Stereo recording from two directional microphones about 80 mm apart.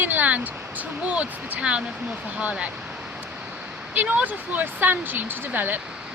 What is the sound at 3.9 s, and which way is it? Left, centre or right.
Speech, centre.